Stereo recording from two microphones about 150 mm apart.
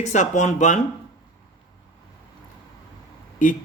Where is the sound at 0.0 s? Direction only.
50° left (ahead or behind).